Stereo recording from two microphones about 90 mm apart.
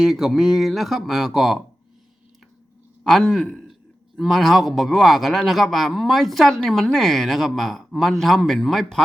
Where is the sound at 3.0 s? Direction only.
Centre (ahead or behind).